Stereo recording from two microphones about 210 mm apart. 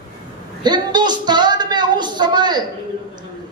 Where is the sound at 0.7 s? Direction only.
20° right (ahead or behind).